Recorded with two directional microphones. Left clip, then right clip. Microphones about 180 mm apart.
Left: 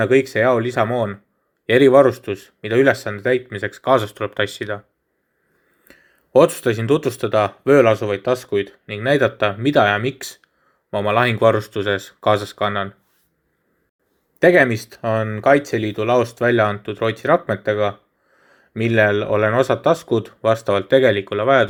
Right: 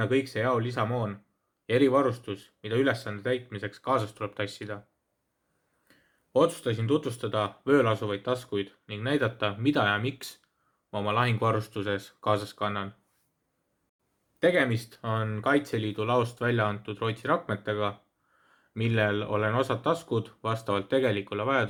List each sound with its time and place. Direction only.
0.0 s speech: 30° left (ahead or behind)
5.9 s speech: 35° left (ahead or behind)
14.3 s speech: 30° left (ahead or behind)